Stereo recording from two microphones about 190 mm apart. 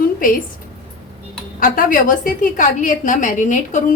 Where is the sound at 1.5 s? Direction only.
45° left (ahead or behind).